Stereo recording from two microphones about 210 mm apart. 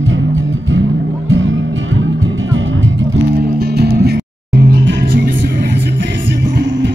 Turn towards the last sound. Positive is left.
turn(degrees=-50)  # may be behind; listen again after turning